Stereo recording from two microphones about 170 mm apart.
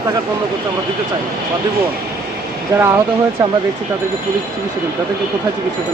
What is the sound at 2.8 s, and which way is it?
Speech, 15° right (ahead or behind).